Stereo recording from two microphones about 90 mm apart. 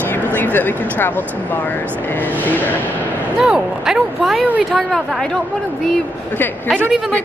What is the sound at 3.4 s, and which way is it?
Speech, 5° right (ahead or behind).